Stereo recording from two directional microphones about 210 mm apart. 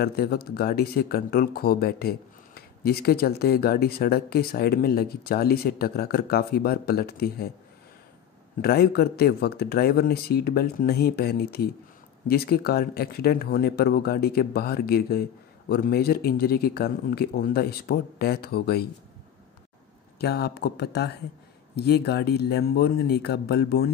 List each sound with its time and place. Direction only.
0.0 s speech: 45° left (ahead or behind)
8.5 s speech: 45° left (ahead or behind)
20.2 s speech: 50° left (ahead or behind)